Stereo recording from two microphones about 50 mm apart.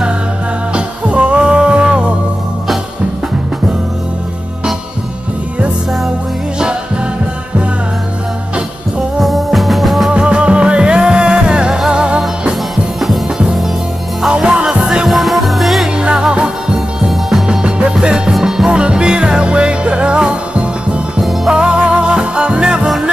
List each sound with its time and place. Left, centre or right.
0.7 s music: right
9.2 s music: centre
10.1 s music: centre
14.3 s music: centre
15.0 s music: centre
16.0 s music: centre
17.1 s music: centre
17.5 s music: centre
18.3 s music: centre
18.7 s music: centre
21.2 s music: centre
21.5 s music: centre